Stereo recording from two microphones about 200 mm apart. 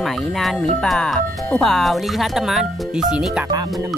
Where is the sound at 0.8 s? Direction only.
Centre (ahead or behind).